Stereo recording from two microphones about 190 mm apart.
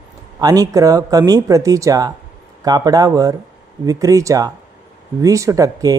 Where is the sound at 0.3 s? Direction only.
20° right (ahead or behind).